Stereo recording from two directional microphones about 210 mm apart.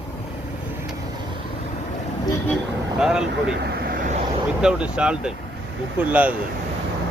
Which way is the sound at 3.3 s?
50° right (ahead or behind).